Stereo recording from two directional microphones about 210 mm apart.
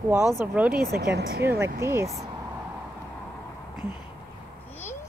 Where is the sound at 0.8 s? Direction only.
50° right (ahead or behind).